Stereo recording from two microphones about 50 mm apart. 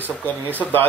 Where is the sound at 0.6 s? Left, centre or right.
Left.